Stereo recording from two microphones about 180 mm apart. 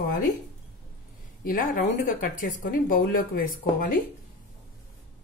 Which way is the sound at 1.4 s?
45° left (ahead or behind).